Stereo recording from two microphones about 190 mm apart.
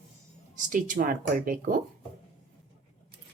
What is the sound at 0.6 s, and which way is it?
Speech, 45° right (ahead or behind).